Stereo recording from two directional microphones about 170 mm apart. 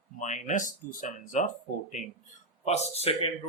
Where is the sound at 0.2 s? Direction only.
45° left (ahead or behind).